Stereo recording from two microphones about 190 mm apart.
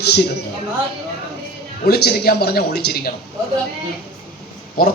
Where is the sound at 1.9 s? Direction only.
55° left (ahead or behind).